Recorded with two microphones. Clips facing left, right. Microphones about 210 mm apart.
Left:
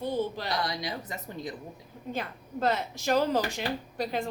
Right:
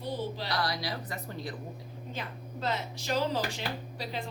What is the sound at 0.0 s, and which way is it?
Speech, 50° left (ahead or behind).